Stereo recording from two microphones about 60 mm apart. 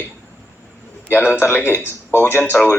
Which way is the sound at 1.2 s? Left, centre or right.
Centre.